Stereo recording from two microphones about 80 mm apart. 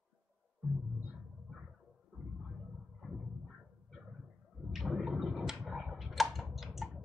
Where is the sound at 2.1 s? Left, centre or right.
Centre.